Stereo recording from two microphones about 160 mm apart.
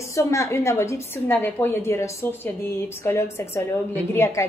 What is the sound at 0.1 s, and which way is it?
A woman's voice, 20° left (ahead or behind).